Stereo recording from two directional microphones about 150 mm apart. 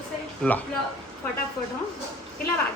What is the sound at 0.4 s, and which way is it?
Speech, 5° left (ahead or behind).